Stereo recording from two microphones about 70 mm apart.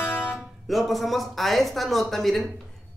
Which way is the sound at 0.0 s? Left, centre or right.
Left.